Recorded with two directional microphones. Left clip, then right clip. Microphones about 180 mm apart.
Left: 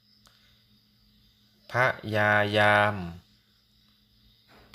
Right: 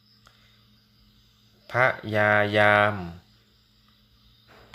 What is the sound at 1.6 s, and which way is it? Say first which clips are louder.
Speech: right 3 dB; 10° left (ahead or behind).